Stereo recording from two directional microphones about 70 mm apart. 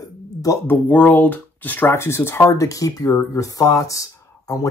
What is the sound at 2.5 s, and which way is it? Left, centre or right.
Speech, left.